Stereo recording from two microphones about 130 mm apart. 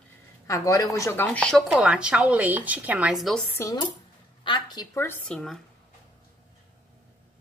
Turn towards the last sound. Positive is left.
turn(degrees=5)  # may be behind; listen again after turning